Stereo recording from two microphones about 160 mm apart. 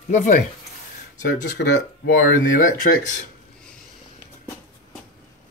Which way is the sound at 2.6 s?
55° left (ahead or behind).